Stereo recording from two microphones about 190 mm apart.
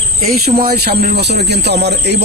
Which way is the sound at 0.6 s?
50° right (ahead or behind).